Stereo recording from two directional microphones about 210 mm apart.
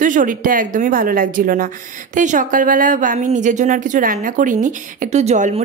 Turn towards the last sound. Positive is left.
turn(degrees=-30)  # may be behind; listen again after turning